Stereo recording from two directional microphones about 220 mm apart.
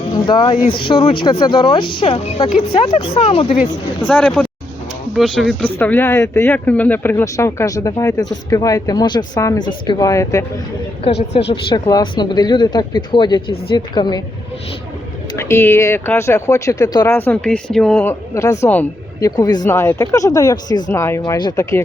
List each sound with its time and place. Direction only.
0.1 s speech: 20° left (ahead or behind)
4.0 s speech: 5° left (ahead or behind)
11.7 s speech: 20° left (ahead or behind)
15.4 s speech: 10° left (ahead or behind)